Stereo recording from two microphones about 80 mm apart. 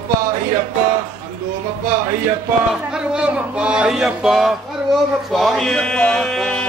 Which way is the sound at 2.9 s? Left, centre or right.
Centre.